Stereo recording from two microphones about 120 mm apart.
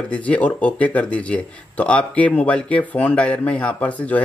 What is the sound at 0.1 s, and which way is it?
Speech, 10° left (ahead or behind).